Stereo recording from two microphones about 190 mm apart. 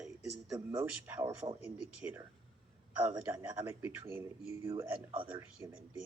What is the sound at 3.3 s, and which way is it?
Speech, 10° right (ahead or behind).